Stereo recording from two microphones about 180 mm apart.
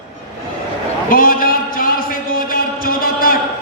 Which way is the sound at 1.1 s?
55° left (ahead or behind).